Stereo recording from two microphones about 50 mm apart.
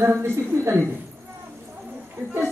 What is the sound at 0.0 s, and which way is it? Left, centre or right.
Speech, right.